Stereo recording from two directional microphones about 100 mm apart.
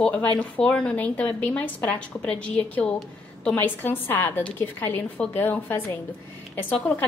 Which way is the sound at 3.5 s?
20° left (ahead or behind).